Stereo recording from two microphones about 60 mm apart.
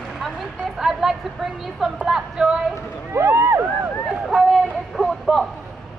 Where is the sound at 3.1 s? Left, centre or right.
Right.